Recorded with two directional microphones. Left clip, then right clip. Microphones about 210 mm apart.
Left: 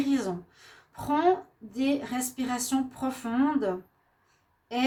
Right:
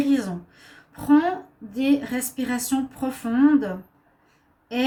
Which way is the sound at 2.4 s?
40° left (ahead or behind).